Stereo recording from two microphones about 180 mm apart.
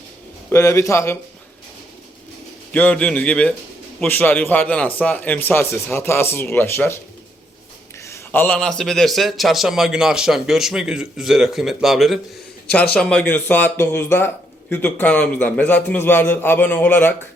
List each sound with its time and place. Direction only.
0.5 s speech: 15° left (ahead or behind)
2.7 s speech: 10° left (ahead or behind)
8.0 s speech: 15° left (ahead or behind)